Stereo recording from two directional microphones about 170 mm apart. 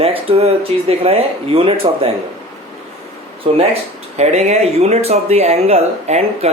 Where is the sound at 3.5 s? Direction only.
30° right (ahead or behind).